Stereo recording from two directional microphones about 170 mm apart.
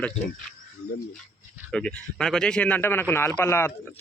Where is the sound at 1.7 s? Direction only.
5° left (ahead or behind).